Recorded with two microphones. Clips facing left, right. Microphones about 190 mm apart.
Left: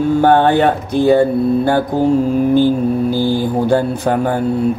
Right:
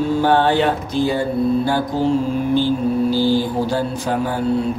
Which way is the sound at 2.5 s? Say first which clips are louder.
Left 4 dB; 50° left (ahead or behind).